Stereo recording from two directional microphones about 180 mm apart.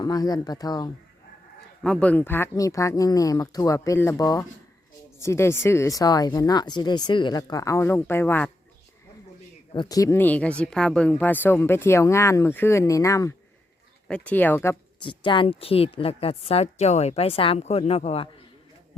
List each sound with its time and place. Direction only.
0.0 s speech: 20° left (ahead or behind)
1.8 s speech: 5° left (ahead or behind)
9.7 s speech: 20° left (ahead or behind)
14.9 s a woman's voice: 25° left (ahead or behind)